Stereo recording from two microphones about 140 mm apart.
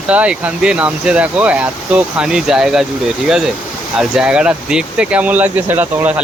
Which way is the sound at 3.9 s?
5° right (ahead or behind).